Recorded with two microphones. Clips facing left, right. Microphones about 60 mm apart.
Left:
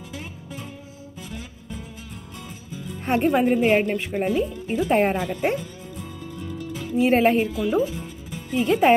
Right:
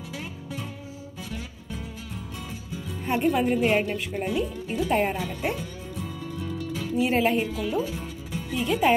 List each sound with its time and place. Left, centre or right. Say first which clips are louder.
3.3 s a woman's voice: left 3 dB; left
7.0 s a woman's voice: left 5 dB; left